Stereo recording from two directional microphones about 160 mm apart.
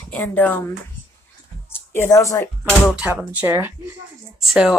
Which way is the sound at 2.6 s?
Centre (ahead or behind).